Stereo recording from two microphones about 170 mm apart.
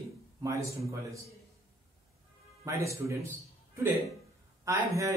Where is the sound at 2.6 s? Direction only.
20° right (ahead or behind).